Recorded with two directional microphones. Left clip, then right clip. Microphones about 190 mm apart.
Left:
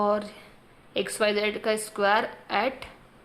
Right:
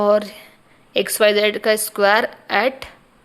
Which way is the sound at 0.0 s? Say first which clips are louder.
Right 9 dB; 45° right (ahead or behind).